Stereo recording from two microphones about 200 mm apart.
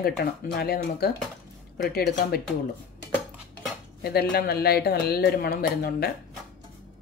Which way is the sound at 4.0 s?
50° left (ahead or behind).